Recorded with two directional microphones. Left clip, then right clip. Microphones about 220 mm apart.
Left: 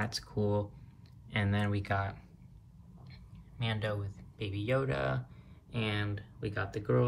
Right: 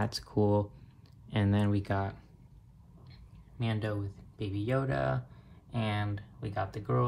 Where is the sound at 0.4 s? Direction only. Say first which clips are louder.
Right 5 dB; 15° right (ahead or behind).